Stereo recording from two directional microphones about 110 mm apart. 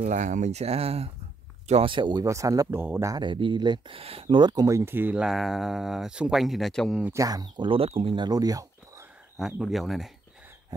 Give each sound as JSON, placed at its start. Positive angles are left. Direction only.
{"t": 0.0, "sound": "speech", "side_deg": -90}
{"t": 1.7, "sound": "speech", "side_deg": -55}
{"t": 2.2, "sound": "speech", "side_deg": -30}
{"t": 3.3, "sound": "speech", "side_deg": -45}
{"t": 4.4, "sound": "speech", "side_deg": -40}
{"t": 5.2, "sound": "speech", "side_deg": 0}
{"t": 7.1, "sound": "speech", "side_deg": -30}
{"t": 8.3, "sound": "a sound", "side_deg": -35}
{"t": 9.6, "sound": "speech", "side_deg": 0}